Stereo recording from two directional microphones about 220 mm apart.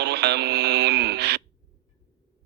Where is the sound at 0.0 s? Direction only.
50° right (ahead or behind).